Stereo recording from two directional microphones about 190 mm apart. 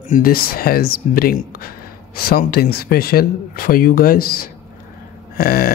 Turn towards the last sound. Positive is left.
turn(degrees=50)  # may be behind; listen again after turning